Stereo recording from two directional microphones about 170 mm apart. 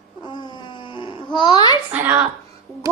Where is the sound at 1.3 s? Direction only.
25° left (ahead or behind).